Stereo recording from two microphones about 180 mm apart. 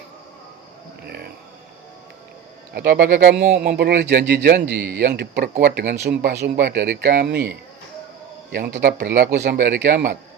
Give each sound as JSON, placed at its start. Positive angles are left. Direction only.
{"t": 1.0, "sound": "a sound", "side_deg": -65}
{"t": 2.7, "sound": "speech", "side_deg": -60}
{"t": 8.5, "sound": "speech", "side_deg": -60}